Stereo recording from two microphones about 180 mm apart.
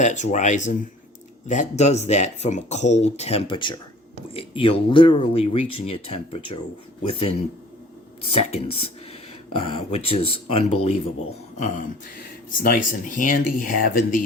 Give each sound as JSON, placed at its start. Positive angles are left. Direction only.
{"t": 0.0, "sound": "speech", "side_deg": 40}